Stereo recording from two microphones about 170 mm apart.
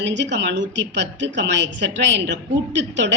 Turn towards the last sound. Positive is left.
turn(degrees=-90)